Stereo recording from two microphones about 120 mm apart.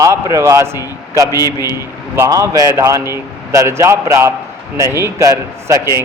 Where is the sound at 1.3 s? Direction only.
30° left (ahead or behind).